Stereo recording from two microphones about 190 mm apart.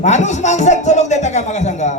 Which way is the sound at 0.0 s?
40° left (ahead or behind).